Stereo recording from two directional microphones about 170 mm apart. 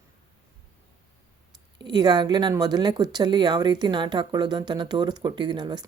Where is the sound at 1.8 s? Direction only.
25° right (ahead or behind).